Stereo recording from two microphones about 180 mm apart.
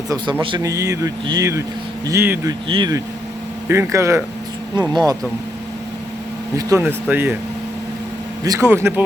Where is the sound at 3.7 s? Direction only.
15° right (ahead or behind).